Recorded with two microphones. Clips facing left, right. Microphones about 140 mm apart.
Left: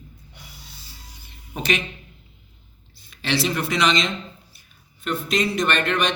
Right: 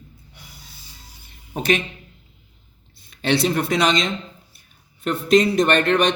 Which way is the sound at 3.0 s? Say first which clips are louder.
Right 4 dB; 55° right (ahead or behind).